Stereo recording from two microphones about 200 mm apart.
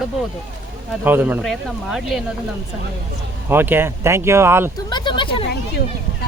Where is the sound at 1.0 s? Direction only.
10° right (ahead or behind).